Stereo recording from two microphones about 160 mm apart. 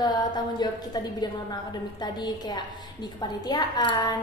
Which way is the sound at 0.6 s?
25° left (ahead or behind).